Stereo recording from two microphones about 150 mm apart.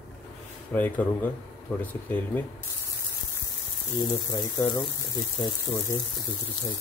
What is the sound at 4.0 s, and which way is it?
Speech, 25° left (ahead or behind).